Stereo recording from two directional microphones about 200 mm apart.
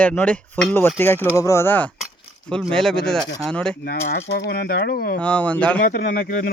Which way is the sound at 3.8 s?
55° left (ahead or behind).